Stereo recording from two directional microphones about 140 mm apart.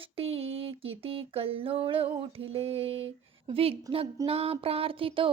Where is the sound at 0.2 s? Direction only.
45° right (ahead or behind).